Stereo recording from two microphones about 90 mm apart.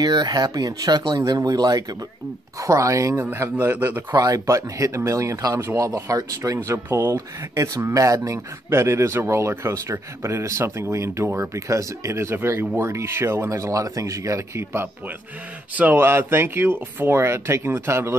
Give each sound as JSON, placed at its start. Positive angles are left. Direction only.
{"t": 0.0, "sound": "speech", "side_deg": -50}
{"t": 3.3, "sound": "speech", "side_deg": -20}
{"t": 4.1, "sound": "speech", "side_deg": -40}
{"t": 15.7, "sound": "speech", "side_deg": -20}